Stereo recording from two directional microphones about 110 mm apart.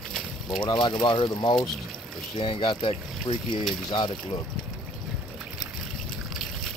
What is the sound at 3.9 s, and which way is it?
Speech, 40° left (ahead or behind).